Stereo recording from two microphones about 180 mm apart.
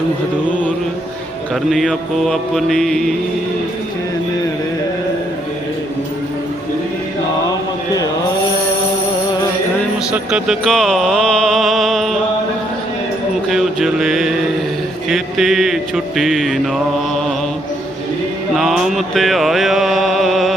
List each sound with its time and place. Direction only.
1.7 s mantra: centre (ahead or behind)
10.1 s speech: 5° right (ahead or behind)
13.5 s mantra: centre (ahead or behind)
18.5 s mantra: centre (ahead or behind)